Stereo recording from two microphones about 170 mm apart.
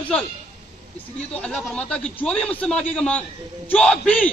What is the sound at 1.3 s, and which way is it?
A man's voice, 5° left (ahead or behind).